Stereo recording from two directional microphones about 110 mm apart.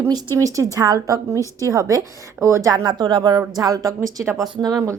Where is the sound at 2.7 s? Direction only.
40° right (ahead or behind).